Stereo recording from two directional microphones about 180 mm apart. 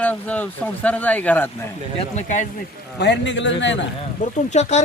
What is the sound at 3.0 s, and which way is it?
Speech, 80° left.